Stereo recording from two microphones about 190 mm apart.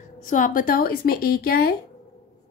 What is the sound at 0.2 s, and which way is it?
A woman's voice, 40° left (ahead or behind).